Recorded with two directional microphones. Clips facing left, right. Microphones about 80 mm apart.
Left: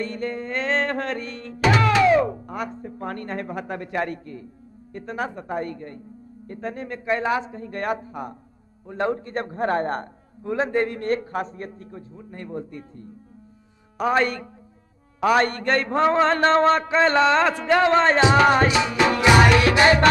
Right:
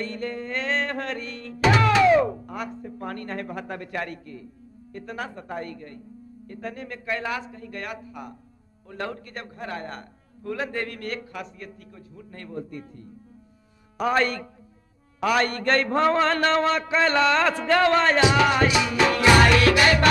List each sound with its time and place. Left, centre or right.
0.0 s music: left
2.4 s a man's voice: left
8.8 s a man's voice: left
10.4 s a man's voice: left